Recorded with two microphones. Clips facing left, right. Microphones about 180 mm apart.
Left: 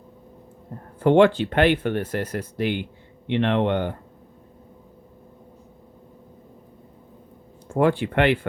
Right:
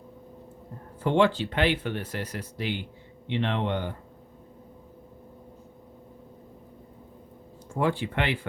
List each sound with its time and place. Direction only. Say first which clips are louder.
0.9 s speech: left 7 dB; 60° left (ahead or behind)
7.7 s speech: left 7 dB; 60° left (ahead or behind)